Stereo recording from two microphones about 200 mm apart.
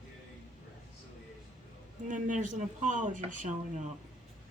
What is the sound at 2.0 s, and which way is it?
Speech, 40° right (ahead or behind).